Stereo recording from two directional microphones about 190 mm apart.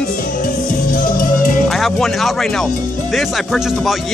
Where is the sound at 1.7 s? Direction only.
Centre (ahead or behind).